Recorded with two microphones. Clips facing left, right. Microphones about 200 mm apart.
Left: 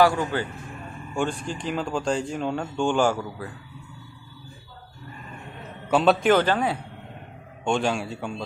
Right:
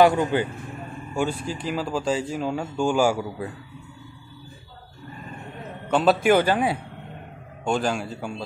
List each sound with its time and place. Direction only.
0.0 s a man's voice: 20° right (ahead or behind)
1.1 s speech: 5° right (ahead or behind)
5.9 s a man's voice: centre (ahead or behind)